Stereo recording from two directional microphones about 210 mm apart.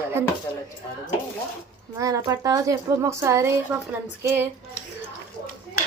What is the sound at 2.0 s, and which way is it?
A woman's voice, 15° right (ahead or behind).